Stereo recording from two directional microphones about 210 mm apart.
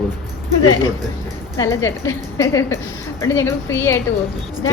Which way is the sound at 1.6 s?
15° left (ahead or behind).